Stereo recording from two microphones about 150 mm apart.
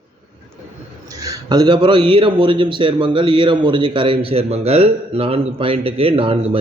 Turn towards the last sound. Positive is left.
turn(degrees=-40)  # may be behind; listen again after turning